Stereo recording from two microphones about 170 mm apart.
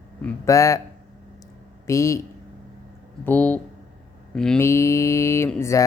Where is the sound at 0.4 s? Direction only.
20° left (ahead or behind).